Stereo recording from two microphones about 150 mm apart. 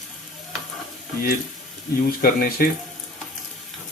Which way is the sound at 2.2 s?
75° left (ahead or behind).